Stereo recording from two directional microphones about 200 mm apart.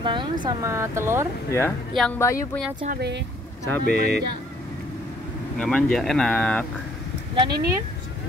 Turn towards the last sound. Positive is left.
turn(degrees=-25)  # may be behind; listen again after turning